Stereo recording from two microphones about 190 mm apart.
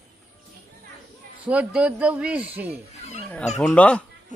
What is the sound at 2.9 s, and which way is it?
Speech, 35° left (ahead or behind).